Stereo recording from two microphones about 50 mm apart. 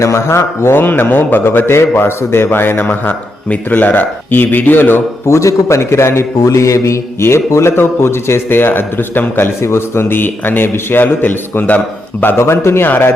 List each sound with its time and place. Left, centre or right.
0.0 s speech: left
5.2 s a man's voice: left
9.6 s speech: left
12.4 s a man's voice: left
12.9 s speech: left